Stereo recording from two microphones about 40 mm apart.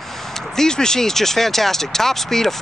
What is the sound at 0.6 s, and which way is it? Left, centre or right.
Speech, centre.